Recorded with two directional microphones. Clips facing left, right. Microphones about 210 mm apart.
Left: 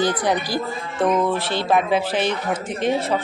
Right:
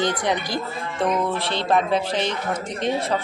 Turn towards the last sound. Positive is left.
turn(degrees=5)  # may be behind; listen again after turning